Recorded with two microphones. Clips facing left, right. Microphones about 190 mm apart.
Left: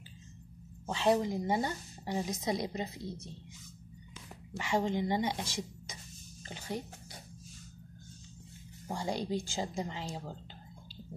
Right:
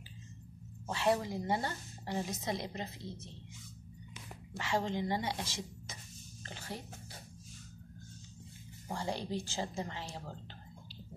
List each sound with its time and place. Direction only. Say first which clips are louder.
0.8 s a woman's voice: left 3 dB; 20° left (ahead or behind)
4.6 s a woman's voice: left 3 dB; 15° left (ahead or behind)
8.8 s a woman's voice: left 3 dB; 15° left (ahead or behind)